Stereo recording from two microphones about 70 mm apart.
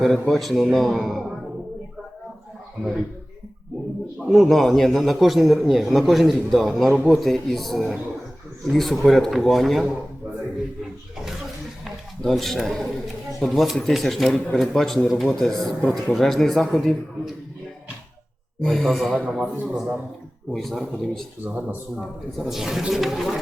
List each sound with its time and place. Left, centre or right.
0.0 s a man's voice: centre
4.3 s a man's voice: centre
12.2 s a man's voice: centre
18.6 s a man's voice: centre
20.5 s a man's voice: centre
21.4 s speech: right
21.9 s a man's voice: centre